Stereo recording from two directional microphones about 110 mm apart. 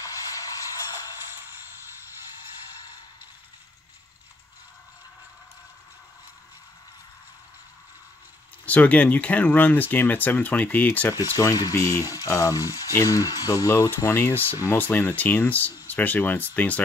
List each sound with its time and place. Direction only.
0.0 s vehicle: 30° left (ahead or behind)
8.6 s speech: 15° left (ahead or behind)
11.3 s speech: 30° left (ahead or behind); by 16.8 s 15° left (ahead or behind)